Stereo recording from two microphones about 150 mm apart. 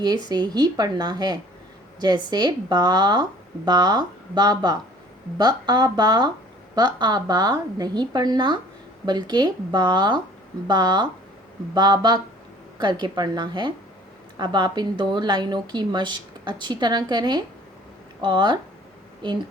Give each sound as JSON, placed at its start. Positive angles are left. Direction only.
{"t": 0.0, "sound": "a woman's voice", "side_deg": -25}